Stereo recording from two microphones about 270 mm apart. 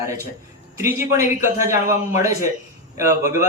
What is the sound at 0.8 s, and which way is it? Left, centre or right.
A man's voice, centre.